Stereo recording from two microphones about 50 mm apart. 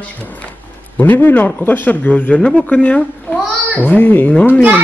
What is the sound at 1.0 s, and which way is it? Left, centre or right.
A woman's voice, left.